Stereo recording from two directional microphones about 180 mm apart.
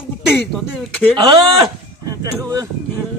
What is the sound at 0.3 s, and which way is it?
Speech, 10° left (ahead or behind).